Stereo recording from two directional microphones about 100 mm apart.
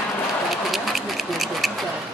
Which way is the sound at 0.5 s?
Centre (ahead or behind).